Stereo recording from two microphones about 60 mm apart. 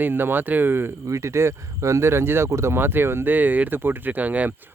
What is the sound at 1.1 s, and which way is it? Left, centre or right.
Speech, right.